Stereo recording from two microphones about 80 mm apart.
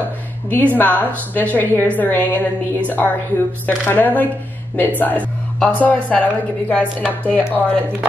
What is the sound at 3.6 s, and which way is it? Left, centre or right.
Speech, left.